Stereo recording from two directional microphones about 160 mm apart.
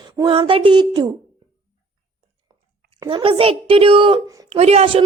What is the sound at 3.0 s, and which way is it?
A woman's voice, 35° right (ahead or behind).